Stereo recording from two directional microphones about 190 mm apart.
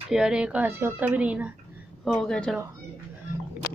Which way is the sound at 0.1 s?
5° right (ahead or behind).